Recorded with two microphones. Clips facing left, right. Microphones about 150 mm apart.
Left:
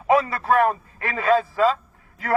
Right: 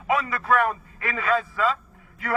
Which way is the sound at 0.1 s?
35° left (ahead or behind).